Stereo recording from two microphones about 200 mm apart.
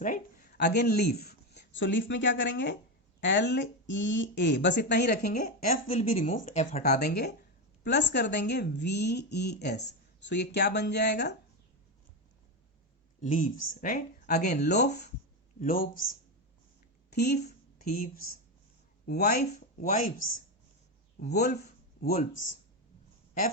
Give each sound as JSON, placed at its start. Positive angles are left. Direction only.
{"t": 0.0, "sound": "speech", "side_deg": 40}
{"t": 5.6, "sound": "speech", "side_deg": 35}
{"t": 7.0, "sound": "speech", "side_deg": 55}
{"t": 13.2, "sound": "speech", "side_deg": 40}
{"t": 14.5, "sound": "speech", "side_deg": 55}
{"t": 15.6, "sound": "speech", "side_deg": 45}
{"t": 17.1, "sound": "a woman's voice", "side_deg": 55}
{"t": 17.4, "sound": "a sound", "side_deg": 50}
{"t": 19.0, "sound": "speech", "side_deg": 50}
{"t": 21.2, "sound": "speech", "side_deg": 55}